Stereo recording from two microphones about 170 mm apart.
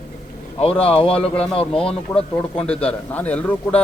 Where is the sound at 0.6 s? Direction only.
35° left (ahead or behind).